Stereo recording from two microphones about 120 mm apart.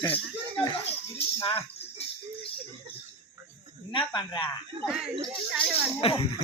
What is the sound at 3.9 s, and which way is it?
Speech, 40° left (ahead or behind).